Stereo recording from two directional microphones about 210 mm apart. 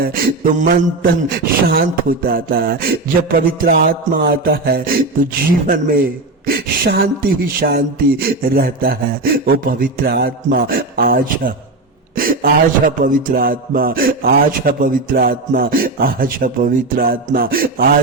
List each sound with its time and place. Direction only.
0.0 s speech: 45° right (ahead or behind)